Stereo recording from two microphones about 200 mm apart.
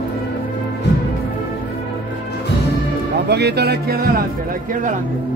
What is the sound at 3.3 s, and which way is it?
Music, 55° right (ahead or behind).